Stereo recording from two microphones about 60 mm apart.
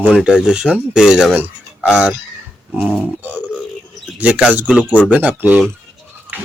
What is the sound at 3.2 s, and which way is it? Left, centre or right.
Speech, right.